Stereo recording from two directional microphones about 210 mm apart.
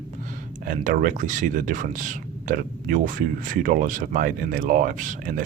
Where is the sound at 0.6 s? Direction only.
40° right (ahead or behind).